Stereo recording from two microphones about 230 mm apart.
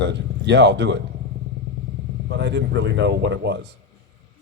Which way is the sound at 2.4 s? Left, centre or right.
Right.